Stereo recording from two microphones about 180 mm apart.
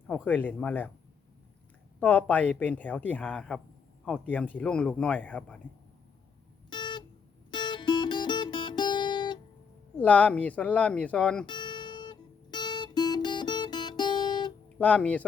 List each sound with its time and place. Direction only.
0.1 s speech: 10° left (ahead or behind)
2.0 s speech: 10° left (ahead or behind)
6.7 s music: 25° left (ahead or behind)
10.0 s speech: 10° left (ahead or behind)
11.4 s guitar: 25° left (ahead or behind)
14.8 s speech: 10° left (ahead or behind)